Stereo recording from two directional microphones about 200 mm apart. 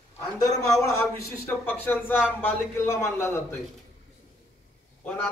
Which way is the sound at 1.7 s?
10° left (ahead or behind).